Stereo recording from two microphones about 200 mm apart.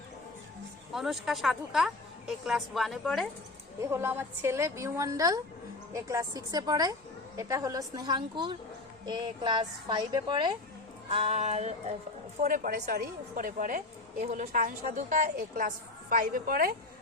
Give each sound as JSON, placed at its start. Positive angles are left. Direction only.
{"t": 0.9, "sound": "a woman's voice", "side_deg": 0}
{"t": 3.8, "sound": "a woman's voice", "side_deg": -10}
{"t": 11.1, "sound": "music", "side_deg": -30}
{"t": 12.4, "sound": "a woman's voice", "side_deg": -40}